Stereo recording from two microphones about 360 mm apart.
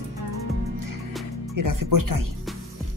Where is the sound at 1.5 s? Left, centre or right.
Right.